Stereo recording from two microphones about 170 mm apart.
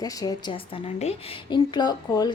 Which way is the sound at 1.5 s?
25° left (ahead or behind).